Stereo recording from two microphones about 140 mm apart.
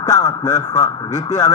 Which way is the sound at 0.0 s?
25° left (ahead or behind).